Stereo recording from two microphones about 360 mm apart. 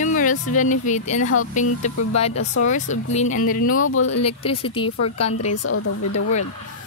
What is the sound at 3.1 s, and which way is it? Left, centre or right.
Speech, left.